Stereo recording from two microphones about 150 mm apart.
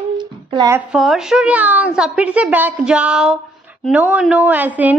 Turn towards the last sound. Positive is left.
turn(degrees=-10)  # may be behind; listen again after turning